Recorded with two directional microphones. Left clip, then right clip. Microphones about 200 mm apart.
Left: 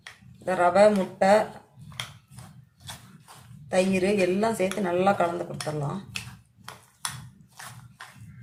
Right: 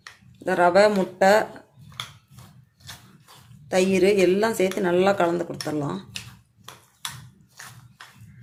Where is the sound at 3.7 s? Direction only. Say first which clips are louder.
Right 4 dB; 45° right (ahead or behind).